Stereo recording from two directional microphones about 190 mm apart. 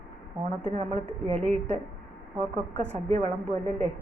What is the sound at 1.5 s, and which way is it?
Speech, 35° right (ahead or behind).